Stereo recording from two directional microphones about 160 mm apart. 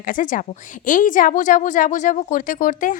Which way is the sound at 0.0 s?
55° left (ahead or behind).